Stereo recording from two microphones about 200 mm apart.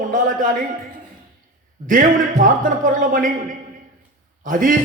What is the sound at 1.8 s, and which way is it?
A man's voice, 40° right (ahead or behind).